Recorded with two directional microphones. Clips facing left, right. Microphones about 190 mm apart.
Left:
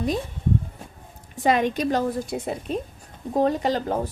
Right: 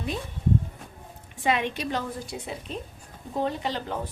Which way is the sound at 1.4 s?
40° left (ahead or behind).